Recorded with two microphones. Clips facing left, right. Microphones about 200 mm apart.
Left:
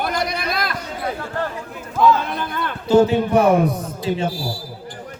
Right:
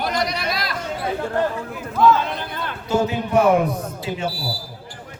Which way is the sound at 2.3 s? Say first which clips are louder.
Left 3 dB; 55° left (ahead or behind).